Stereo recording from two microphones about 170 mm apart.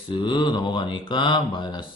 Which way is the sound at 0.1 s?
30° left (ahead or behind).